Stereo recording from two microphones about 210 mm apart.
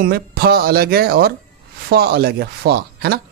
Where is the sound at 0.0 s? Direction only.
50° right (ahead or behind).